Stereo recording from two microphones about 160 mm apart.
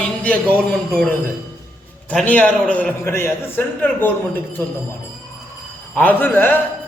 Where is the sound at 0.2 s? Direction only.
10° left (ahead or behind).